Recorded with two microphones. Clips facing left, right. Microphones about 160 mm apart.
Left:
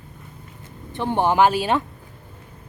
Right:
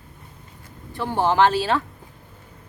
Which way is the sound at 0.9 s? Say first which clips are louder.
Left 1 dB; 20° left (ahead or behind).